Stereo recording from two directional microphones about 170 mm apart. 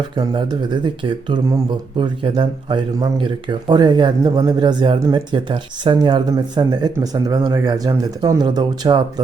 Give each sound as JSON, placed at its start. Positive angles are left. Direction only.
{"t": 0.2, "sound": "speech", "side_deg": -25}